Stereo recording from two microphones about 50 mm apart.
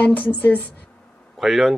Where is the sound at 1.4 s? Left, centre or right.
Centre.